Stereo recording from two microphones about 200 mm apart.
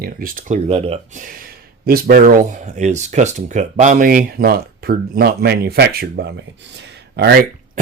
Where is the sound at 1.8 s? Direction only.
45° right (ahead or behind).